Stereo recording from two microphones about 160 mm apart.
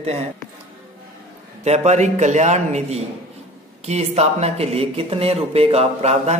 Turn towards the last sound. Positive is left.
turn(degrees=-40)  # may be behind; listen again after turning